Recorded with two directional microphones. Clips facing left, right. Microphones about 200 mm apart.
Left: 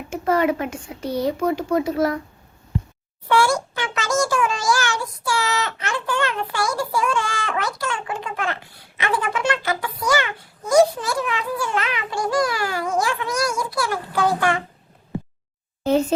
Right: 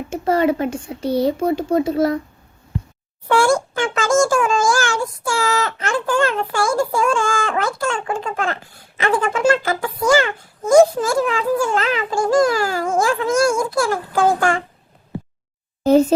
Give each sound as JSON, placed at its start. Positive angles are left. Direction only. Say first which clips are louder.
{"t": 0.1, "sound": "speech", "louder": "right 2 dB", "side_deg": -30}
{"t": 3.2, "sound": "a child's voice", "louder": "right 3 dB", "side_deg": -50}
{"t": 15.8, "sound": "speech", "louder": "right 6 dB", "side_deg": -40}